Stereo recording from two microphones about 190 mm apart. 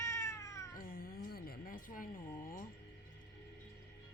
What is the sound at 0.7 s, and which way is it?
Speech, 50° left (ahead or behind).